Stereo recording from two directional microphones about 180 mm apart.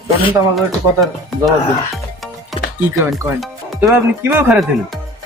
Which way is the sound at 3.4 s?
5° right (ahead or behind).